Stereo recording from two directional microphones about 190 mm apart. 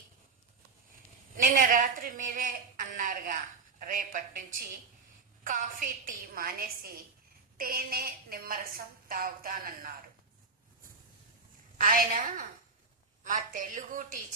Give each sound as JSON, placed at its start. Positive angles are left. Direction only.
{"t": 1.5, "sound": "a woman's voice", "side_deg": -45}
{"t": 5.4, "sound": "a woman's voice", "side_deg": -45}
{"t": 11.8, "sound": "a woman's voice", "side_deg": -45}